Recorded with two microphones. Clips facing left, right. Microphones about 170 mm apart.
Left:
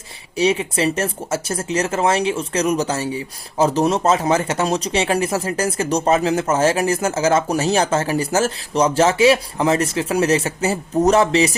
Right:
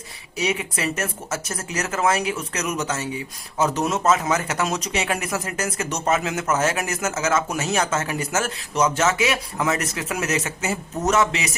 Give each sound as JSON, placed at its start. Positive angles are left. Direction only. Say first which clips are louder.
{"t": 0.3, "sound": "speech", "louder": "left 7 dB", "side_deg": 30}